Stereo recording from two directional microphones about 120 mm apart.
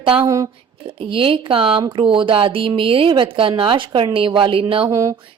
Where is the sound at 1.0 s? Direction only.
45° right (ahead or behind).